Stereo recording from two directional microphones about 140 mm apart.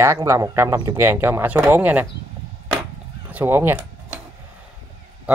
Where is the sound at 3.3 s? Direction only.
15° right (ahead or behind).